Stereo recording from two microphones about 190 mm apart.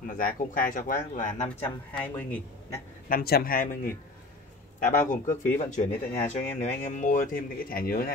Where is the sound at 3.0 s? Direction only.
50° left (ahead or behind).